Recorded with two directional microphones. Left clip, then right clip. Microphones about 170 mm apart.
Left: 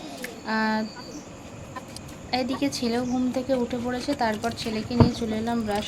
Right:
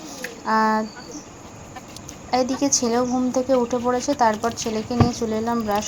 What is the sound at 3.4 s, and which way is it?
Speech, 15° right (ahead or behind).